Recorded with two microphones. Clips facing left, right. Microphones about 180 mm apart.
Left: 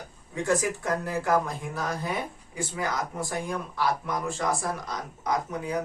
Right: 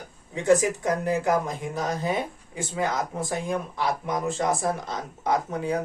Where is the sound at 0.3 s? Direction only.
20° right (ahead or behind).